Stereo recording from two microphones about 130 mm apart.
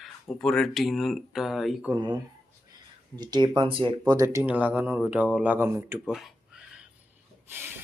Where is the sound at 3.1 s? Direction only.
35° right (ahead or behind).